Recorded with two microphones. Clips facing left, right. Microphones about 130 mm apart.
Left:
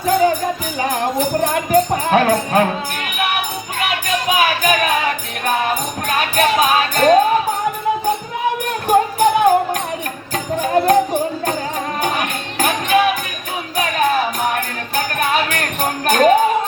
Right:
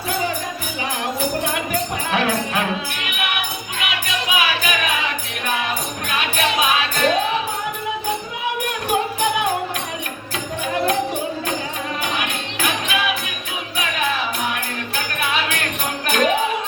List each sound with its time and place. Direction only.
0.8 s music: 45° left (ahead or behind)
8.9 s music: 40° left (ahead or behind)